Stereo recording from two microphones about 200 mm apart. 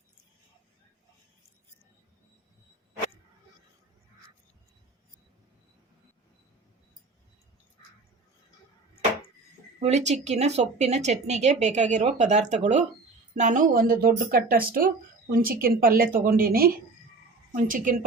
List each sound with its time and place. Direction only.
9.8 s speech: 35° right (ahead or behind)